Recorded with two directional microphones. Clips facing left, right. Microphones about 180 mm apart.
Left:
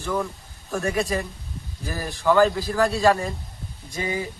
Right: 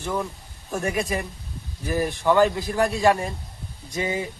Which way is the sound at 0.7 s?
20° right (ahead or behind).